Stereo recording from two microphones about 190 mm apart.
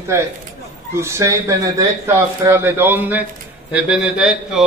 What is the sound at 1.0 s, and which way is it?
A man's voice, 15° right (ahead or behind).